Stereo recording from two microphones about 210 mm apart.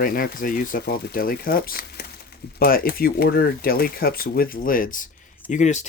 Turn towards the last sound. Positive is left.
turn(degrees=35)  # may be behind; listen again after turning